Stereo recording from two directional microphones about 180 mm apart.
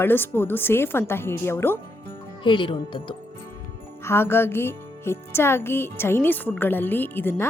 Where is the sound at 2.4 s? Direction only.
30° left (ahead or behind).